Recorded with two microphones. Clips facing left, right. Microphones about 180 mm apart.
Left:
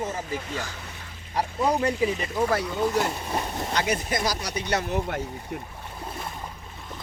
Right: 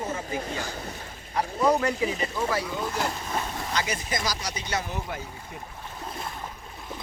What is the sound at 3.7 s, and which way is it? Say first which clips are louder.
Speech: left 4 dB; 55° left (ahead or behind).